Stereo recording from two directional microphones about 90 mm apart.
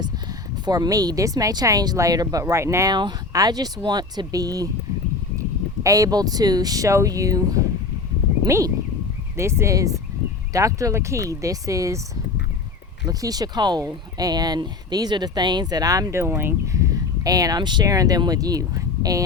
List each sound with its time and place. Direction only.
0.6 s speech: 45° right (ahead or behind)
2.9 s speech: 50° right (ahead or behind)
13.1 s speech: 45° right (ahead or behind); by 16.6 s 25° right (ahead or behind)
16.7 s a sound: 40° right (ahead or behind); by 17.8 s 55° right (ahead or behind)
17.8 s speech: 40° right (ahead or behind)